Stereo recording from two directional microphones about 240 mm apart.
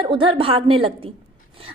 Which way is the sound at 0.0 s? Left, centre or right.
Right.